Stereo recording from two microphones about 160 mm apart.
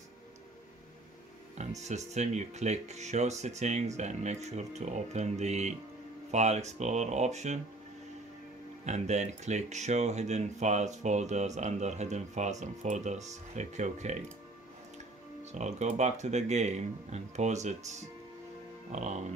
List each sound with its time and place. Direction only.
1.8 s speech: 45° right (ahead or behind)
8.8 s speech: 45° right (ahead or behind)
15.5 s speech: 45° right (ahead or behind)